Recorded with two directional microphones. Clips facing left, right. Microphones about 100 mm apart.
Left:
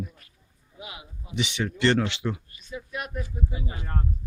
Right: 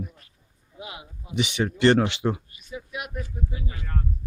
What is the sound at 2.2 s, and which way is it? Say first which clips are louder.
Speech: right 4 dB; 30° right (ahead or behind).